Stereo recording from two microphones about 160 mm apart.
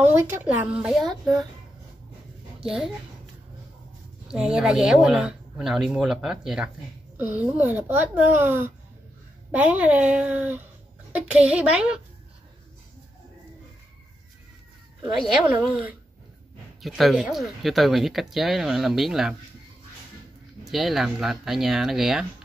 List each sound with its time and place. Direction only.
0.0 s speech: 15° right (ahead or behind)
2.6 s a woman's voice: 5° right (ahead or behind)
4.3 s speech: 5° right (ahead or behind)
15.4 s speech: 10° right (ahead or behind)
20.7 s speech: centre (ahead or behind)